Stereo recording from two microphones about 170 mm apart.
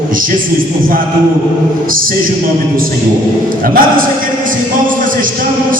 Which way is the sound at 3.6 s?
55° right (ahead or behind).